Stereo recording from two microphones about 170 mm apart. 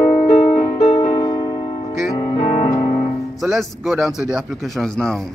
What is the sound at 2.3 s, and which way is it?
Music, 40° left (ahead or behind).